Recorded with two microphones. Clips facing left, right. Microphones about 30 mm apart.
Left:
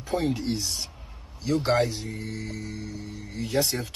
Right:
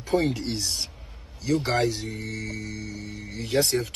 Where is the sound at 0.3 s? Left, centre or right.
Right.